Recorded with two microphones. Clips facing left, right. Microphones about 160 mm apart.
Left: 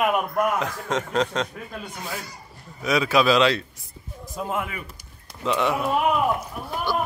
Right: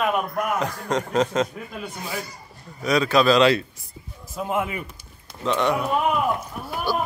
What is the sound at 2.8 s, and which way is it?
Speech, 5° left (ahead or behind).